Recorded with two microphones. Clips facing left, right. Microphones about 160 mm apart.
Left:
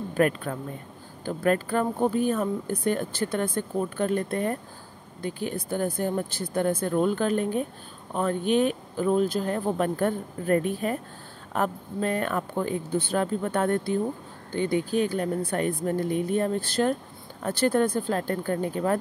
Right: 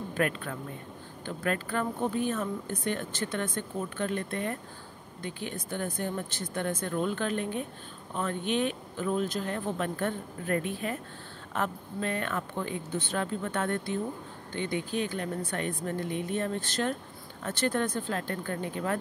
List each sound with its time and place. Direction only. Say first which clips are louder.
0.2 s speech: left 7 dB; 35° left (ahead or behind)